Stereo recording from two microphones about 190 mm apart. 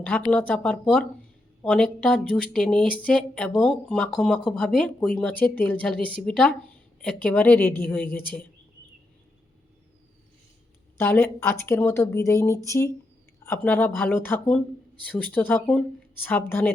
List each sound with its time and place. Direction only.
0.3 s speech: 5° left (ahead or behind)
10.9 s speech: 10° left (ahead or behind)